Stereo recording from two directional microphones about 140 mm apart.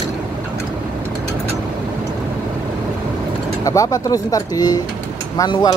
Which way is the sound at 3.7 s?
25° left (ahead or behind).